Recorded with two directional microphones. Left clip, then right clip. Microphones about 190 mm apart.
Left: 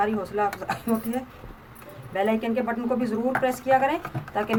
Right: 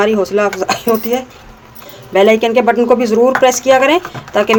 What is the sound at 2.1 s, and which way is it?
Speech, 45° right (ahead or behind).